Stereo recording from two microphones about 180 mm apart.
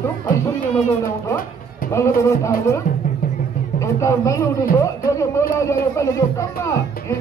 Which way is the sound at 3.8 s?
15° left (ahead or behind).